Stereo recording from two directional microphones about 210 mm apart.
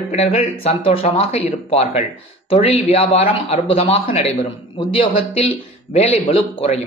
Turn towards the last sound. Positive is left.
turn(degrees=25)  # may be behind; listen again after turning